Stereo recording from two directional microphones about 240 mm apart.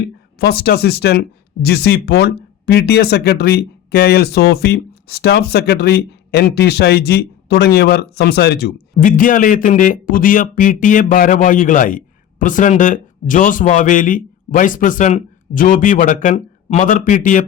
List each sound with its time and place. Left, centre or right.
0.3 s speech: left